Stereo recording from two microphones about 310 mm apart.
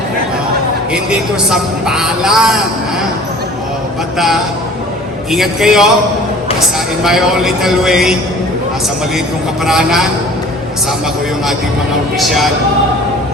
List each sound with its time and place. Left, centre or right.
1.1 s a man's voice: centre
5.3 s a man's voice: centre
7.0 s a man's voice: centre
9.6 s a man's voice: centre
12.1 s a man's voice: centre